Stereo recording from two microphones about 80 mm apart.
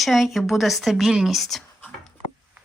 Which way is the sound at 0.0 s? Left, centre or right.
Centre.